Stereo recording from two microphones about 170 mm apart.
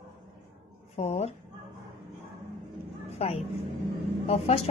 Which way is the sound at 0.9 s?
40° left (ahead or behind).